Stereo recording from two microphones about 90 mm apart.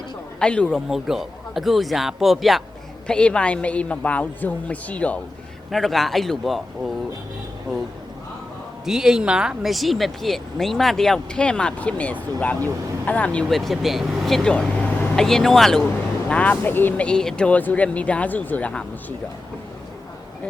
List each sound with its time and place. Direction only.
0.3 s a man's voice: 10° left (ahead or behind)
0.9 s speech: 5° right (ahead or behind)
3.1 s a woman's voice: 10° left (ahead or behind)
5.7 s speech: centre (ahead or behind)
8.9 s a woman's voice: 5° right (ahead or behind); by 13.4 s 15° left (ahead or behind)
13.5 s speech: centre (ahead or behind)
16.3 s a woman's voice: 15° left (ahead or behind)
17.1 s a woman's voice: 10° left (ahead or behind)